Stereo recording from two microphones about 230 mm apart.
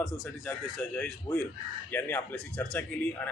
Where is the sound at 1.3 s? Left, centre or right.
Centre.